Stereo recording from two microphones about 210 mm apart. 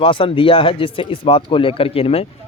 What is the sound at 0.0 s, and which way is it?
A man's voice, 25° left (ahead or behind).